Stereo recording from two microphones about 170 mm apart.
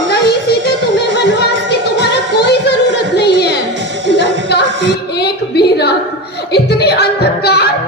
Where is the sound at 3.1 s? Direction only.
80° left.